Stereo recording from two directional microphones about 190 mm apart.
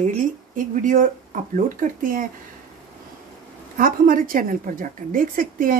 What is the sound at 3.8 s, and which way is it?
Speech, 45° right (ahead or behind).